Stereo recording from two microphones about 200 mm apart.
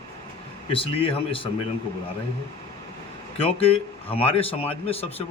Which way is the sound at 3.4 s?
30° left (ahead or behind).